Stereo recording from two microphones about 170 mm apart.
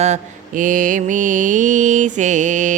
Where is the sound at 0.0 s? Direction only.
45° right (ahead or behind).